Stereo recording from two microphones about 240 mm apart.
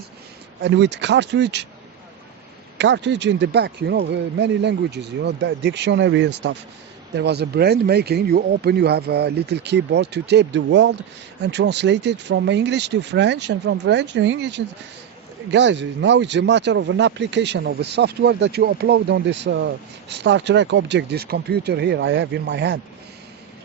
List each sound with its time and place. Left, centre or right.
0.6 s speech: right
2.7 s speech: right